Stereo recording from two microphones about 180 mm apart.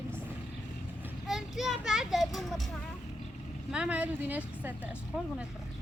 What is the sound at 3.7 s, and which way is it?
Speech, 5° right (ahead or behind).